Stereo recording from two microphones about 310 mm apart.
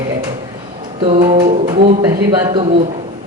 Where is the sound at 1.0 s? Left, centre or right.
Centre.